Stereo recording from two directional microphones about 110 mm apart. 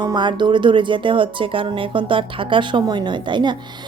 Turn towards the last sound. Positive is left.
turn(degrees=-45)  # may be behind; listen again after turning